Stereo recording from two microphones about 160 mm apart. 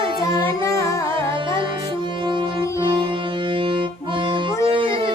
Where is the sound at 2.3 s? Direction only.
30° right (ahead or behind).